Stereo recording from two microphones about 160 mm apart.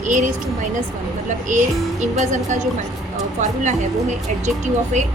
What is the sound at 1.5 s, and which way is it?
Speech, 50° right (ahead or behind).